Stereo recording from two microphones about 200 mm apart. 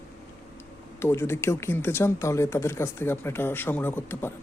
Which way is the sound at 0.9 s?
10° left (ahead or behind).